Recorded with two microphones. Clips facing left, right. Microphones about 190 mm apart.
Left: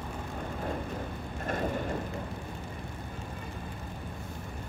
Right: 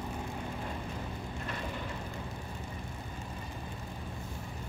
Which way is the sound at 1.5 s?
50° left (ahead or behind).